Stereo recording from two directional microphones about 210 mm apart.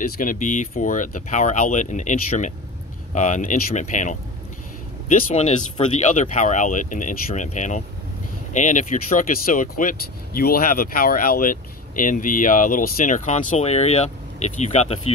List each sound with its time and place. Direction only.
0.0 s speech: 40° left (ahead or behind)
5.8 s speech: 35° left (ahead or behind)